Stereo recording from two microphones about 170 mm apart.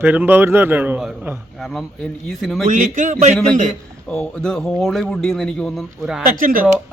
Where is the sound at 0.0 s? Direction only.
10° right (ahead or behind).